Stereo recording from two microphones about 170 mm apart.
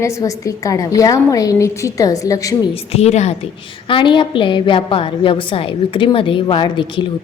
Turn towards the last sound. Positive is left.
turn(degrees=30)  # may be behind; listen again after turning